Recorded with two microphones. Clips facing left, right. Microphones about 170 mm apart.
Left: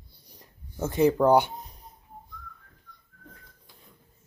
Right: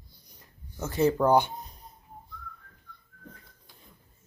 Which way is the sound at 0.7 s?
25° left (ahead or behind).